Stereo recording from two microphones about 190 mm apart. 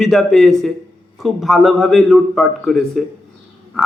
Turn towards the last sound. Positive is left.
turn(degrees=0)  # may be behind; listen again after turning